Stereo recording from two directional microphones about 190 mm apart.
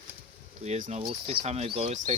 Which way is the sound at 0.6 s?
35° right (ahead or behind).